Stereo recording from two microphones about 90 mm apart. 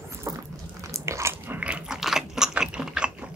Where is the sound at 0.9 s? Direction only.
35° right (ahead or behind).